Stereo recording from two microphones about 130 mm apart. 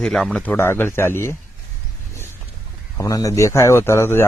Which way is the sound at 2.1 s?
20° left (ahead or behind).